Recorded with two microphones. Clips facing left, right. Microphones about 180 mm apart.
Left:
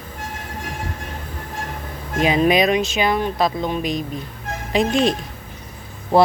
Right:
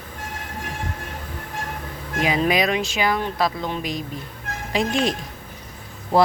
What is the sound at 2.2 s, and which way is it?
Speech, 25° left (ahead or behind).